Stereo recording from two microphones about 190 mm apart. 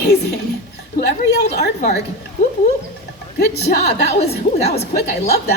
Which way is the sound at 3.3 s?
60° left (ahead or behind).